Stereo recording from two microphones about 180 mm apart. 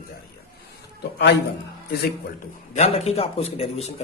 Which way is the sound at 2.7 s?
35° left (ahead or behind).